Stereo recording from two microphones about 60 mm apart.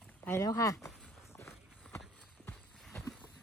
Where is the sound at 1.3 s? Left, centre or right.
Left.